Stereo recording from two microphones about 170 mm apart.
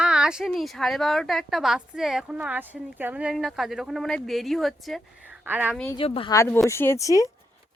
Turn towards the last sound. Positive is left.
turn(degrees=20)  # may be behind; listen again after turning